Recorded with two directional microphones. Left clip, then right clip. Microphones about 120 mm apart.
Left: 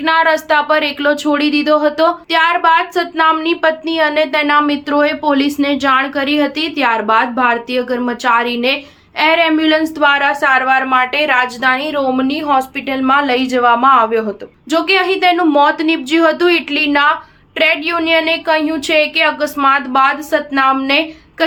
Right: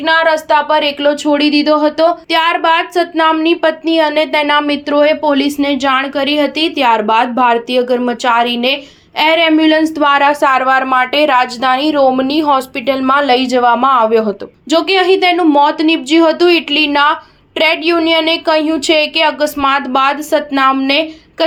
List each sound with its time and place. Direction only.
0.0 s a woman's voice: 20° right (ahead or behind); by 21.4 s 35° right (ahead or behind)